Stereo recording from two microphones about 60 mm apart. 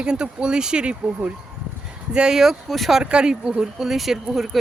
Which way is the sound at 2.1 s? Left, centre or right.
Centre.